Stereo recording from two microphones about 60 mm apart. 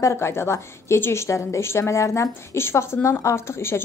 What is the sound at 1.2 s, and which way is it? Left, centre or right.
Speech, left.